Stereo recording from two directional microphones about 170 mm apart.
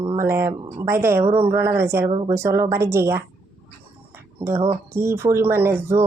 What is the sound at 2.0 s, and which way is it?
Speech, 30° right (ahead or behind).